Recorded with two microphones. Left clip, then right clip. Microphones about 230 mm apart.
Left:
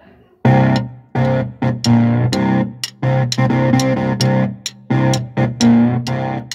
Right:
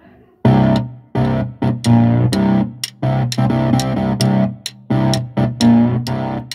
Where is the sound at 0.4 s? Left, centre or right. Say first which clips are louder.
Even; right.